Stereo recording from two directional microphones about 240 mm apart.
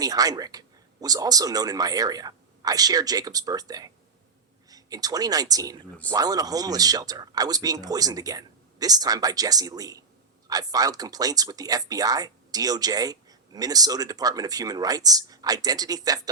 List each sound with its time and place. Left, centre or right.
0.0 s speech: centre